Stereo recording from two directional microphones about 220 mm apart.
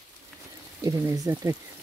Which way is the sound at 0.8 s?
15° right (ahead or behind).